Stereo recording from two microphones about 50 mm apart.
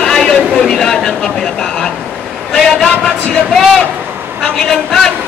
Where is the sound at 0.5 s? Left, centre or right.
Centre.